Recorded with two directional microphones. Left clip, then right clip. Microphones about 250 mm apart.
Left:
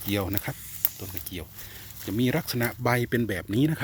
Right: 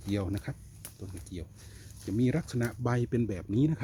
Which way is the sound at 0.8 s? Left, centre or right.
Left.